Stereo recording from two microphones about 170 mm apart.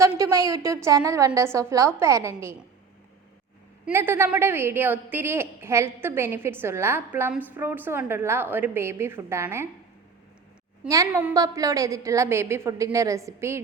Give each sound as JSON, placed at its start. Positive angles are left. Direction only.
{"t": 0.2, "sound": "a woman's voice", "side_deg": -20}
{"t": 3.8, "sound": "a woman's voice", "side_deg": -15}
{"t": 10.8, "sound": "a woman's voice", "side_deg": -20}